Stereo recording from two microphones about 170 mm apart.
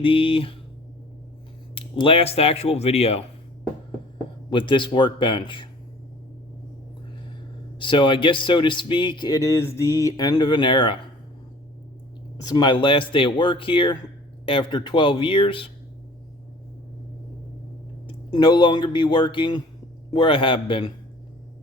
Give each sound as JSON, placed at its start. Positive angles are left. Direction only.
{"t": 0.0, "sound": "speech", "side_deg": 30}
{"t": 1.7, "sound": "speech", "side_deg": 30}
{"t": 4.4, "sound": "speech", "side_deg": 30}
{"t": 7.8, "sound": "speech", "side_deg": 30}
{"t": 12.4, "sound": "speech", "side_deg": 25}
{"t": 18.1, "sound": "speech", "side_deg": 30}